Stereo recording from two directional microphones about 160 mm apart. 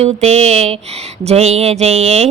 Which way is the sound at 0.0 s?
40° right (ahead or behind).